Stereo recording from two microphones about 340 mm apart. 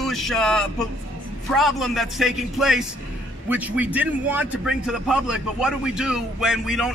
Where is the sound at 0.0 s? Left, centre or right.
Centre.